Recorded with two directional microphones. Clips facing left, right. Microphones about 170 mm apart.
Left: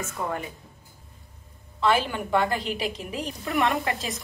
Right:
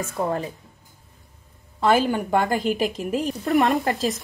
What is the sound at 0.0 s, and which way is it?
Speech, 35° right (ahead or behind).